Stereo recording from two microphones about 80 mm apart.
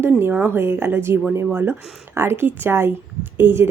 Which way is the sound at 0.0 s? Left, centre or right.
Right.